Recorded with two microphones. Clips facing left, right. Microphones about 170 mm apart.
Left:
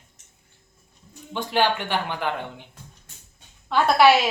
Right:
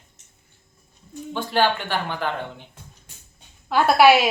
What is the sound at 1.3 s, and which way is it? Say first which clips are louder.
Speech: right 1 dB; 15° left (ahead or behind).